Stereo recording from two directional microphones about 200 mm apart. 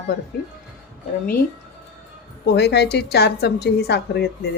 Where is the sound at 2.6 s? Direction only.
55° left (ahead or behind).